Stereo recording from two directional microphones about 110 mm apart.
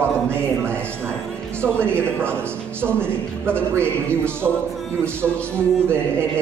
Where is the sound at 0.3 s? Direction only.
20° right (ahead or behind).